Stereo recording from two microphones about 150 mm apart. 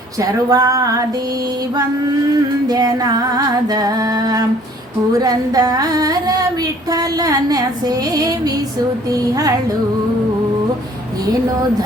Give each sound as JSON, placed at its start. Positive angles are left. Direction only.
{"t": 0.2, "sound": "music", "side_deg": -25}
{"t": 2.6, "sound": "music", "side_deg": -25}